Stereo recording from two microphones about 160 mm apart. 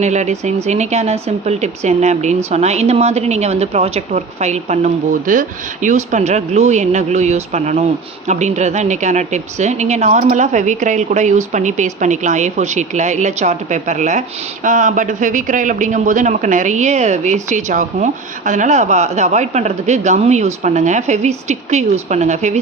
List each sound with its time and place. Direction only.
0.0 s a woman's voice: 45° right (ahead or behind)